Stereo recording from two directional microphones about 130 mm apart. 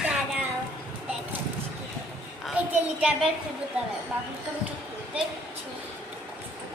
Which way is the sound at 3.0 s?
10° right (ahead or behind).